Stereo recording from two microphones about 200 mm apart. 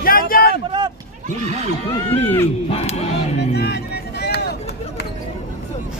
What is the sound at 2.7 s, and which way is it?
Music, 30° left (ahead or behind).